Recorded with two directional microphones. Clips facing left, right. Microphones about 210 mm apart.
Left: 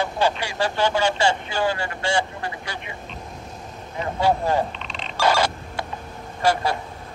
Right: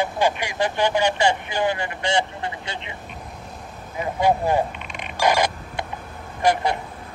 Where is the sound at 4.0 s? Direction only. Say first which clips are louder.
Right 1 dB; 15° right (ahead or behind).